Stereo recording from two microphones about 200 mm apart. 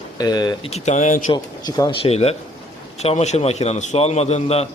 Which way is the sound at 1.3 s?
20° left (ahead or behind).